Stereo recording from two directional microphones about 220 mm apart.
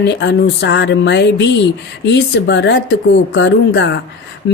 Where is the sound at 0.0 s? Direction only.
50° left (ahead or behind).